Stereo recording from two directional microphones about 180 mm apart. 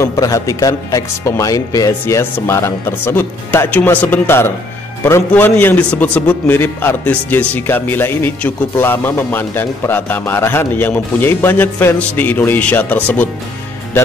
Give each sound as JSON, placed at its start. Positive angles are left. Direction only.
{"t": 0.0, "sound": "a man's voice", "side_deg": 20}